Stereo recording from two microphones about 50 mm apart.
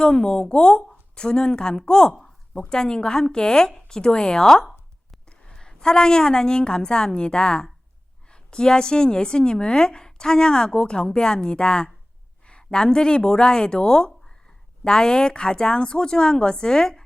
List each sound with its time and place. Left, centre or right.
0.0 s a woman's voice: centre